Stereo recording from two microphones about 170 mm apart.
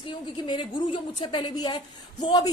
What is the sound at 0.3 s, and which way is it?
A woman's voice, 30° left (ahead or behind).